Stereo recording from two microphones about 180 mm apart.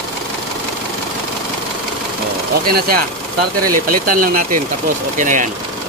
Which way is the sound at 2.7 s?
55° right (ahead or behind).